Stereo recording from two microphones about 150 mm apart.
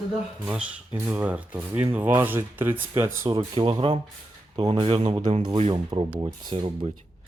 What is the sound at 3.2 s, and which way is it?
Speech, 35° right (ahead or behind).